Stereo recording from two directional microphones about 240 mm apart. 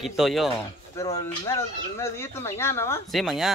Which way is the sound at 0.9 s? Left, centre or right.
Centre.